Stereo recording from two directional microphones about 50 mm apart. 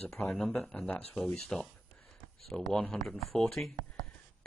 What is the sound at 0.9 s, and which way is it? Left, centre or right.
Speech, left.